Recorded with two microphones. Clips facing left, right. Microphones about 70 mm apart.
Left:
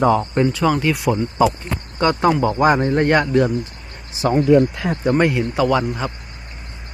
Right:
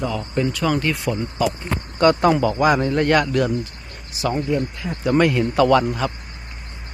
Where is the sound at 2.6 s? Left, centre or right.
Left.